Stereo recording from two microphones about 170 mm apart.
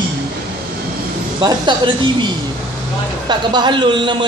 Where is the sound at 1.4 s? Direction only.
25° right (ahead or behind).